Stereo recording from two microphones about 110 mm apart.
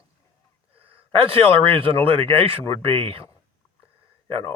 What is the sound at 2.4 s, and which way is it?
Speech, 60° right (ahead or behind).